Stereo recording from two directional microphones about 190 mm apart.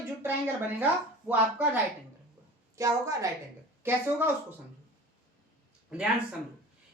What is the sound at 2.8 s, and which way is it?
Speech, 15° right (ahead or behind).